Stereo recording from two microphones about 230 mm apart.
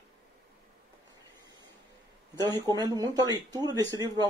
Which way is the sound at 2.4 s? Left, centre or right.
Centre.